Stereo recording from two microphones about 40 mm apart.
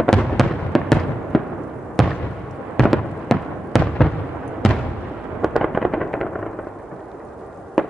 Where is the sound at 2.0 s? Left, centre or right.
Centre.